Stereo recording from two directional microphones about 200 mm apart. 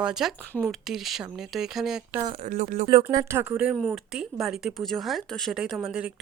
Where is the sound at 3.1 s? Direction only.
15° right (ahead or behind).